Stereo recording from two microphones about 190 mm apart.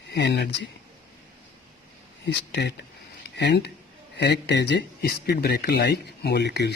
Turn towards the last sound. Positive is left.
turn(degrees=65)  # may be behind; listen again after turning